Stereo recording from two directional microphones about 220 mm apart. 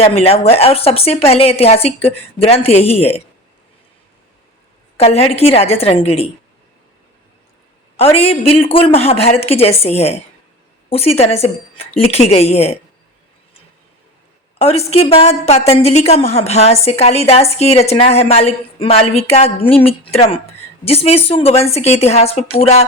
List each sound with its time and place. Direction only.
0.0 s a woman's voice: 30° left (ahead or behind)
4.9 s a woman's voice: 25° left (ahead or behind)
7.9 s a woman's voice: 25° left (ahead or behind)
14.6 s a woman's voice: 30° left (ahead or behind)